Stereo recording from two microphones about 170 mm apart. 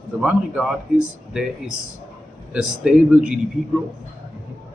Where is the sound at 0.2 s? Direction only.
5° right (ahead or behind).